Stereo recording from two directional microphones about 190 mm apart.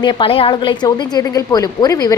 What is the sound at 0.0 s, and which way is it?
A woman's voice, 25° left (ahead or behind).